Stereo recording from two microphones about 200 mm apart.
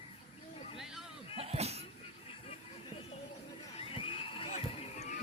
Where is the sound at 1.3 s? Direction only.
30° right (ahead or behind).